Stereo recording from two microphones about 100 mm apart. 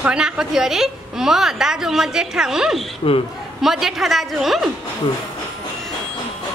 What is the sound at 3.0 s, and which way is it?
Speech, 65° left (ahead or behind).